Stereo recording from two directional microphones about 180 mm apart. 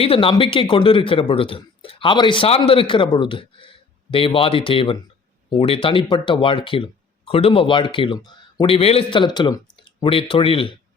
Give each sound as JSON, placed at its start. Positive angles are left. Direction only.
{"t": 0.0, "sound": "speech", "side_deg": 30}